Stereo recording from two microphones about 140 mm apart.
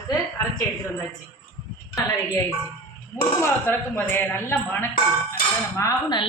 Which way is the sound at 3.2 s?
15° left (ahead or behind).